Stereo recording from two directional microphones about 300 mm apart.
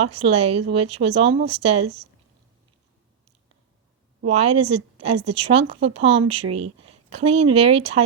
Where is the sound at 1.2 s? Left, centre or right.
Right.